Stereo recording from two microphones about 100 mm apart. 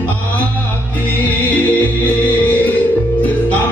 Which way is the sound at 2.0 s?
15° left (ahead or behind).